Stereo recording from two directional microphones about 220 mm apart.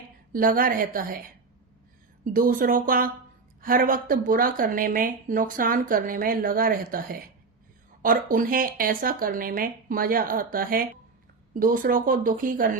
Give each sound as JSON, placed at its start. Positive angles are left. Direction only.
{"t": 0.3, "sound": "a woman's voice", "side_deg": -40}
{"t": 2.2, "sound": "a woman's voice", "side_deg": -40}